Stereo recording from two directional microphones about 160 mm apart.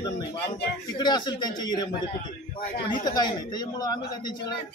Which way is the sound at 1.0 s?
25° left (ahead or behind).